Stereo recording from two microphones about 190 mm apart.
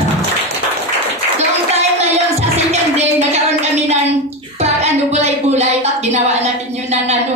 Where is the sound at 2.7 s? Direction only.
35° right (ahead or behind).